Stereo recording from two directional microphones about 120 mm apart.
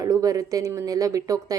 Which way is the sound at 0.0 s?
30° right (ahead or behind).